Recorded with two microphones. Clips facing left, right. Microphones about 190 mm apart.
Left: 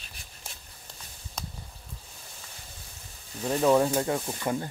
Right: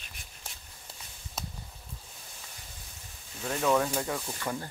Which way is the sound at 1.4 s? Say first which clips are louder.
Even; 5° right (ahead or behind).